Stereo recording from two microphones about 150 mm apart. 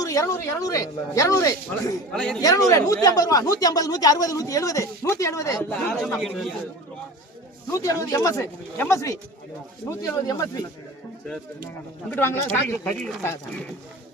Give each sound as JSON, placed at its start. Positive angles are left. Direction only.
{"t": 0.0, "sound": "speech", "side_deg": 20}
{"t": 2.1, "sound": "a man's voice", "side_deg": 5}
{"t": 2.4, "sound": "speech", "side_deg": 25}
{"t": 5.6, "sound": "a man's voice", "side_deg": 5}
{"t": 7.7, "sound": "speech", "side_deg": 20}
{"t": 12.1, "sound": "a man's voice", "side_deg": 15}